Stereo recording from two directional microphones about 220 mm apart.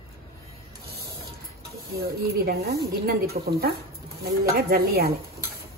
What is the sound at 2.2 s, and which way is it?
Speech, 45° right (ahead or behind).